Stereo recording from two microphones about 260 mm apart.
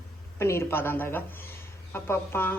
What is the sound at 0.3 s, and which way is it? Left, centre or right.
Speech, centre.